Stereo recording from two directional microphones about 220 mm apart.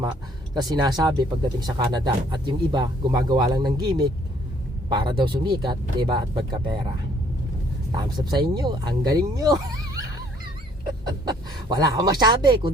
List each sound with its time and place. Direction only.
0.5 s speech: 20° right (ahead or behind)
7.9 s speech: 20° right (ahead or behind)
11.3 s speech: 20° right (ahead or behind)